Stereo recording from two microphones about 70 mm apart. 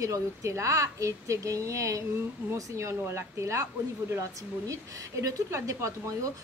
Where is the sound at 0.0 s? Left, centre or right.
Right.